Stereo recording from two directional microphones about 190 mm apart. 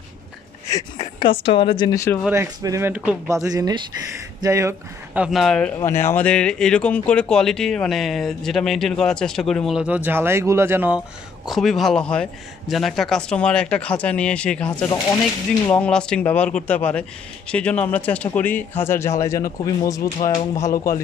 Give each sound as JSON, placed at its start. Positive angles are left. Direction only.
{"t": 0.7, "sound": "speech", "side_deg": 20}
{"t": 2.2, "sound": "speech", "side_deg": -15}
{"t": 3.4, "sound": "speech", "side_deg": -20}
{"t": 11.4, "sound": "speech", "side_deg": 0}